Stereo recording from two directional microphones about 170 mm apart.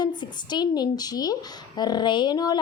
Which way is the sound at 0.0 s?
25° left (ahead or behind).